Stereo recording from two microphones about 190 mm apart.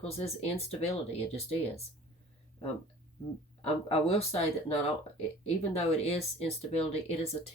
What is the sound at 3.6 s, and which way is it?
Speech, 30° left (ahead or behind).